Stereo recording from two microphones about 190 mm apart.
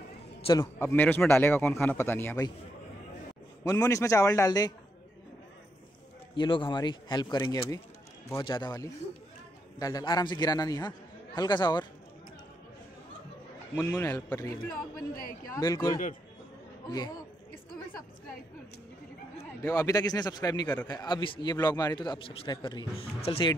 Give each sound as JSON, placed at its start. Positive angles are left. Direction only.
{"t": 0.4, "sound": "a sound", "side_deg": 25}
{"t": 0.7, "sound": "a man's voice", "side_deg": 10}
{"t": 3.6, "sound": "a man's voice", "side_deg": 15}
{"t": 6.3, "sound": "a man's voice", "side_deg": 25}
{"t": 13.7, "sound": "a man's voice", "side_deg": 10}
{"t": 19.6, "sound": "a man's voice", "side_deg": 20}